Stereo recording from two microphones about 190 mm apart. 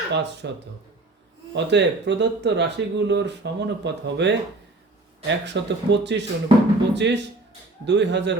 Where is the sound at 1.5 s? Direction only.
65° right (ahead or behind).